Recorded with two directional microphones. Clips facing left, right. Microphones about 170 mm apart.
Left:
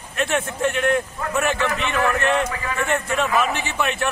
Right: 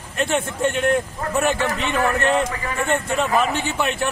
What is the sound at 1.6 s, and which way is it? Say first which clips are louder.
Speech: right 1 dB; 35° right (ahead or behind).